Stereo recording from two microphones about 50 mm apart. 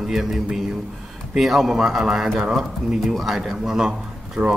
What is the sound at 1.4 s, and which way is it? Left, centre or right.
Speech, centre.